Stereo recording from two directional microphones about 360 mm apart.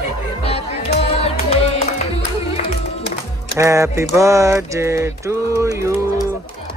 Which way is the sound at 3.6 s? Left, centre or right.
Centre.